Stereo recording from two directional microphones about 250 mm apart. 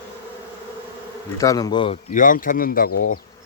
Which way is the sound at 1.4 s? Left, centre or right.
Centre.